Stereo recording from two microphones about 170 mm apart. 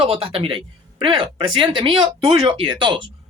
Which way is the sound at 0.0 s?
35° right (ahead or behind).